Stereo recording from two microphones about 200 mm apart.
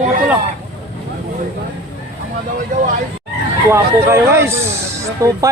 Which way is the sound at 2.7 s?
40° right (ahead or behind).